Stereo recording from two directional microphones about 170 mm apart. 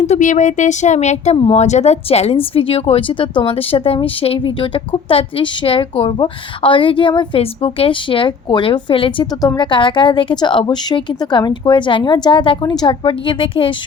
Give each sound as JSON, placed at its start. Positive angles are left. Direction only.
{"t": 0.0, "sound": "a woman's voice", "side_deg": 45}